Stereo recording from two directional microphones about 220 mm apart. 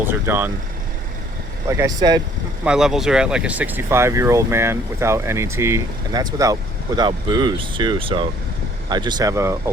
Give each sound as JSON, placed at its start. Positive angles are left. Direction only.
{"t": 0.0, "sound": "speech", "side_deg": -10}
{"t": 1.6, "sound": "speech", "side_deg": -15}
{"t": 2.6, "sound": "speech", "side_deg": -5}